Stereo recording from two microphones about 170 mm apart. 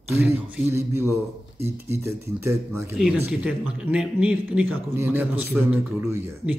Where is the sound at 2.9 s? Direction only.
5° right (ahead or behind).